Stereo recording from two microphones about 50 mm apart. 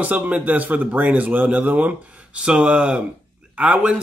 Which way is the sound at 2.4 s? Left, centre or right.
Centre.